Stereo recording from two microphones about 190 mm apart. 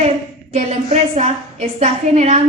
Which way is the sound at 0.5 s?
35° right (ahead or behind).